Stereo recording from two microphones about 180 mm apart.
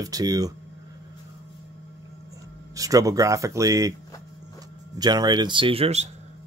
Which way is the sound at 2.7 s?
20° right (ahead or behind).